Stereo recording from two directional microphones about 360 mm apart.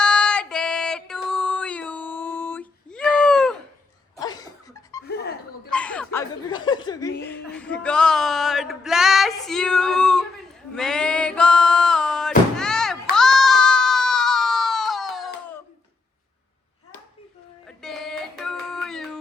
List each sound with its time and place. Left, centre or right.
0.0 s female singing: centre
4.2 s laughter: centre
5.0 s music: left
5.7 s laughter: centre
7.2 s a sound: centre
17.7 s a sound: centre